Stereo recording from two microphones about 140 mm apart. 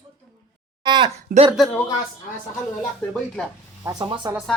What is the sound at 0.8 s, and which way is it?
Speech, 35° right (ahead or behind).